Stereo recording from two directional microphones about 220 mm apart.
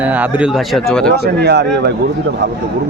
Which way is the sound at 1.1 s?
50° right (ahead or behind).